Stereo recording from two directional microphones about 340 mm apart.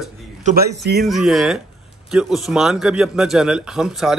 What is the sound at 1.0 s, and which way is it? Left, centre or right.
A man's voice, centre.